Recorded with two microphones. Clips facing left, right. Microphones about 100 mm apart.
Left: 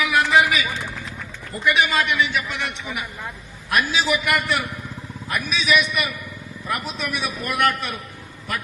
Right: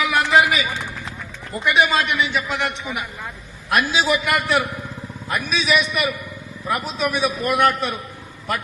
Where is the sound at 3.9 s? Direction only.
35° right (ahead or behind).